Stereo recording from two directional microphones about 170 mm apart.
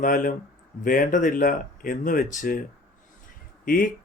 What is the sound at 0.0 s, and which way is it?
Speech, 50° left (ahead or behind).